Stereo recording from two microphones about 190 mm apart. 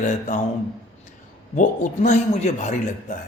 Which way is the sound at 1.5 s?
40° left (ahead or behind).